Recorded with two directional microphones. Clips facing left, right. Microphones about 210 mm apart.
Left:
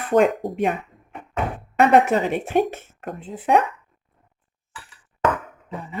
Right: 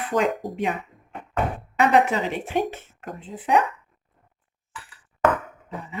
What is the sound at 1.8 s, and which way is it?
Speech, 55° left (ahead or behind).